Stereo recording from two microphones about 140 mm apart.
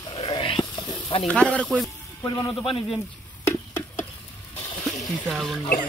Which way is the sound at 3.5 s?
15° left (ahead or behind).